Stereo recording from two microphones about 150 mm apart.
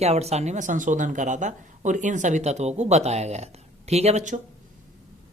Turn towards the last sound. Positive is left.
turn(degrees=-50)  # may be behind; listen again after turning